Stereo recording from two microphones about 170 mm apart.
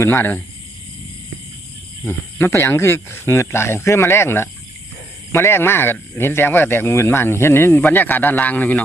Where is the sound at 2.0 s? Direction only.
15° left (ahead or behind).